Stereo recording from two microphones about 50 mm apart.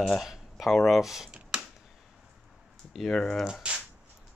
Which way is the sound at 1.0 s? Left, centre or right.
Centre.